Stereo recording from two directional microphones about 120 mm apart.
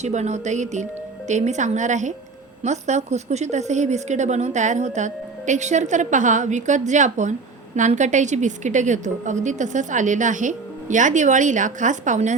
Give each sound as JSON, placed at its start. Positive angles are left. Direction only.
{"t": 0.0, "sound": "a woman's voice", "side_deg": -70}
{"t": 2.6, "sound": "a woman's voice", "side_deg": -70}